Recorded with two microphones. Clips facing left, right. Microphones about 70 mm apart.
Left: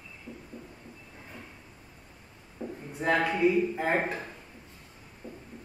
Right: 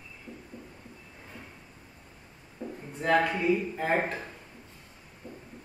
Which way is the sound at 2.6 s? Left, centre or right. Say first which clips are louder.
Left 1 dB; centre.